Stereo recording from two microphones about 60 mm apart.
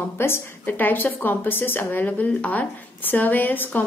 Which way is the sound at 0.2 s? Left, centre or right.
Left.